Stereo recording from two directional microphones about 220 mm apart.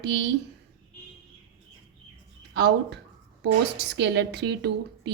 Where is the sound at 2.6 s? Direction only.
50° right (ahead or behind).